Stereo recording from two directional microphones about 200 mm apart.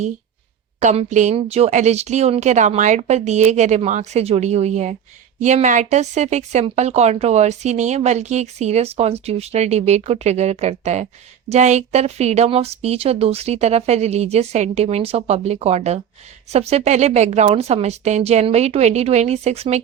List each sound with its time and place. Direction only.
0.8 s speech: 35° right (ahead or behind)